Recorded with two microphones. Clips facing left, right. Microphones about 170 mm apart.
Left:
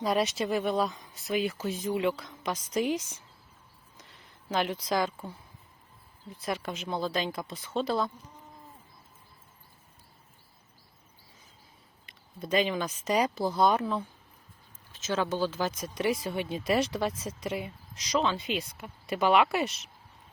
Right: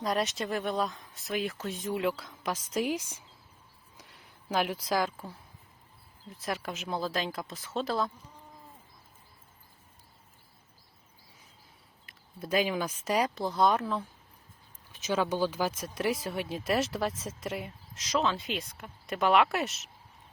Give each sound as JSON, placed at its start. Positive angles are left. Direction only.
{"t": 0.0, "sound": "speech", "side_deg": 0}
{"t": 3.9, "sound": "a sound", "side_deg": -5}
{"t": 6.2, "sound": "speech", "side_deg": 0}
{"t": 12.0, "sound": "speech", "side_deg": -5}
{"t": 14.9, "sound": "speech", "side_deg": -15}